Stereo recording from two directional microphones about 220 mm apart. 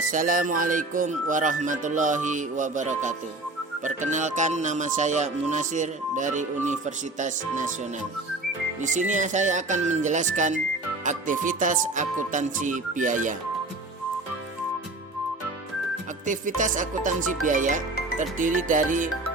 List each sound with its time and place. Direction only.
0.1 s music: 40° right (ahead or behind)
8.8 s music: 35° right (ahead or behind)
16.2 s music: 35° right (ahead or behind)